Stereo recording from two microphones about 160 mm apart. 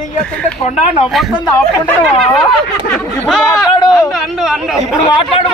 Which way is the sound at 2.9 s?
5° left (ahead or behind).